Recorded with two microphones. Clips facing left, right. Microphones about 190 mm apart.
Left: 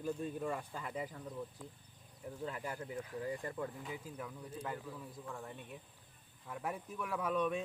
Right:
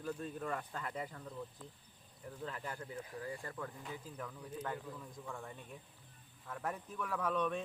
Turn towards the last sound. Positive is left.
turn(degrees=10)  # may be behind; listen again after turning